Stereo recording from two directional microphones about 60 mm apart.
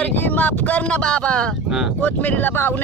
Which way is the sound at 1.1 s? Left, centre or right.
Centre.